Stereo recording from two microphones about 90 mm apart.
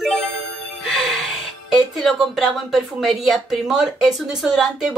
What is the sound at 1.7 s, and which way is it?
Speech, centre (ahead or behind).